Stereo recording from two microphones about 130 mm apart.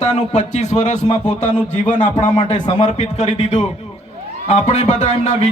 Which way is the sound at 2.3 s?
35° left (ahead or behind).